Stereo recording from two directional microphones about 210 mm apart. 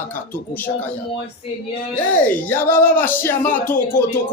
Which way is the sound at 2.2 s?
10° left (ahead or behind).